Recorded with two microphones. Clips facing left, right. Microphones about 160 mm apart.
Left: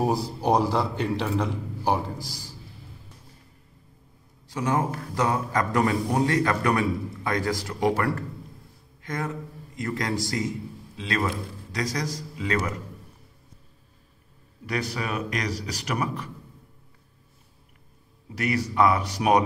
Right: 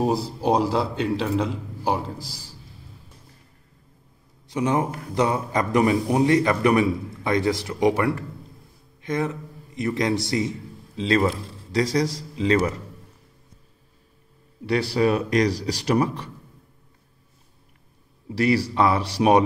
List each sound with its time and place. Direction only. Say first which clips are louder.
1.0 s a man's voice: right 3 dB; centre (ahead or behind)
4.5 s a man's voice: right 3 dB; 20° right (ahead or behind)
14.7 s a man's voice: right 9 dB; 30° right (ahead or behind)
18.3 s a man's voice: right 6 dB; 30° right (ahead or behind)